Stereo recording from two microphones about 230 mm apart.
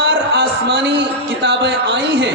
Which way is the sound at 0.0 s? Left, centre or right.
Right.